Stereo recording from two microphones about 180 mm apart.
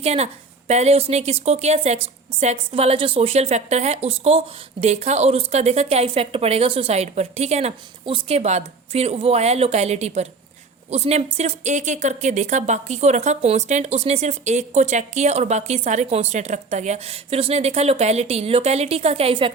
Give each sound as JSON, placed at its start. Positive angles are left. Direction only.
{"t": 0.0, "sound": "a woman's voice", "side_deg": -35}